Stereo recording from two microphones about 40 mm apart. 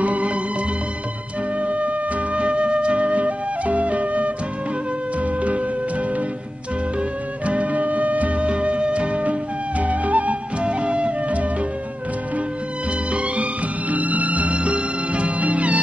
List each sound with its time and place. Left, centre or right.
0.0 s music: right
1.6 s music: right
2.3 s flute: right
7.4 s music: right
10.7 s music: right
13.1 s music: right